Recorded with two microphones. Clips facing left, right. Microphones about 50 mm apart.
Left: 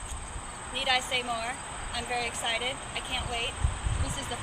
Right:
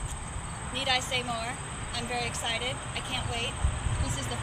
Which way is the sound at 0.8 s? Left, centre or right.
Centre.